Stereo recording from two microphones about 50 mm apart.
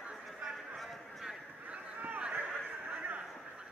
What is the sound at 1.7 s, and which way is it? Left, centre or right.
Boat, right.